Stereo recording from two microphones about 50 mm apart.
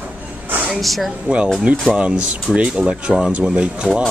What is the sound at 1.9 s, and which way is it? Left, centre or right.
Speech, right.